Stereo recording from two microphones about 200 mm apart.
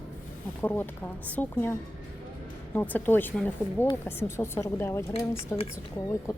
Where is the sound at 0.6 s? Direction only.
10° left (ahead or behind).